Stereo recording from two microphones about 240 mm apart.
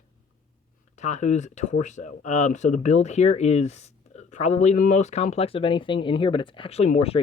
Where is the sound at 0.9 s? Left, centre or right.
Left.